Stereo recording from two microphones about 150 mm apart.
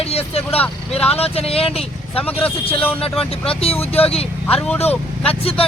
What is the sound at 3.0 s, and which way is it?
Speech, 40° left (ahead or behind).